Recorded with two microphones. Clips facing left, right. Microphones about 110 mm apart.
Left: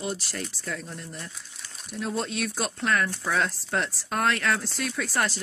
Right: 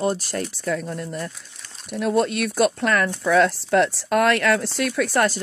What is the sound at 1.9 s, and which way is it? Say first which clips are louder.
Speech: right 10 dB; 65° right (ahead or behind).